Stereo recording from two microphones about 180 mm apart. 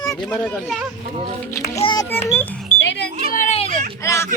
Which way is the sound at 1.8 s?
25° left (ahead or behind).